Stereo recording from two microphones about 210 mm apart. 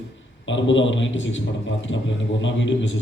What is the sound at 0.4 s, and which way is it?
A man's voice, 60° left (ahead or behind).